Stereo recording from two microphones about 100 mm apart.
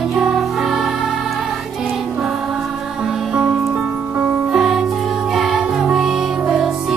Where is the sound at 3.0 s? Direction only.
10° right (ahead or behind).